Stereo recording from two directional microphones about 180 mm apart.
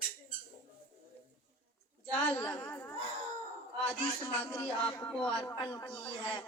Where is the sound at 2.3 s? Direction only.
5° left (ahead or behind).